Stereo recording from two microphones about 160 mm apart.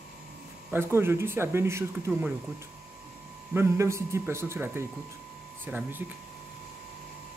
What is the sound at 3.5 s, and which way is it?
Speech, 15° right (ahead or behind).